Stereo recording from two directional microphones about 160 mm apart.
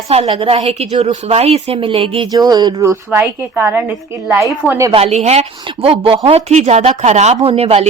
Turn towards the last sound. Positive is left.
turn(degrees=-40)  # may be behind; listen again after turning